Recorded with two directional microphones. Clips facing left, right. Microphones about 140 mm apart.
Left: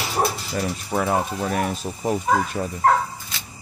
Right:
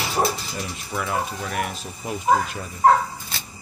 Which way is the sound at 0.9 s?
40° left (ahead or behind).